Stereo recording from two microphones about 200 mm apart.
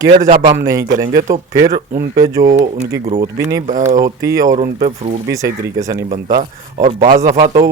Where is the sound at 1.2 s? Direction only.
45° right (ahead or behind).